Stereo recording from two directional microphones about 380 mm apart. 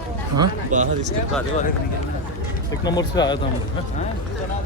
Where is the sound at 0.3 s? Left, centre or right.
Centre.